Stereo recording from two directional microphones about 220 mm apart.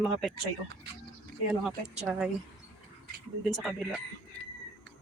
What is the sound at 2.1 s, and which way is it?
Speech, 5° right (ahead or behind).